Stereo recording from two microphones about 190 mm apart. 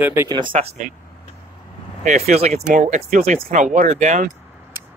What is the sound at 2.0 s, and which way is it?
Speech, 35° right (ahead or behind).